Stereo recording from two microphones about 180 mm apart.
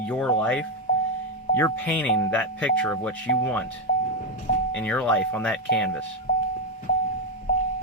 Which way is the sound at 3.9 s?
60° left (ahead or behind).